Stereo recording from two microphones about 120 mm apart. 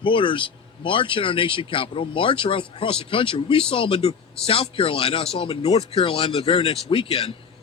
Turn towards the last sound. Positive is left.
turn(degrees=55)  # may be behind; listen again after turning